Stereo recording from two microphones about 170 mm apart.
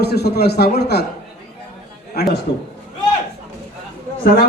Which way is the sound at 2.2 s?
70° left (ahead or behind).